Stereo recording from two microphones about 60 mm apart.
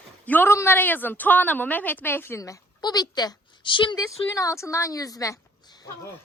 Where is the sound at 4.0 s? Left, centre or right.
Left.